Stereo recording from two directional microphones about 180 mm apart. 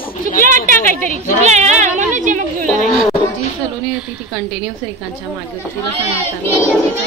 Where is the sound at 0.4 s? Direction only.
45° right (ahead or behind).